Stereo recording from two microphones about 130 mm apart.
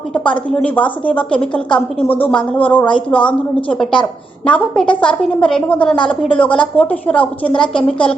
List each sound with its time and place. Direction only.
0.1 s a woman's voice: 10° left (ahead or behind)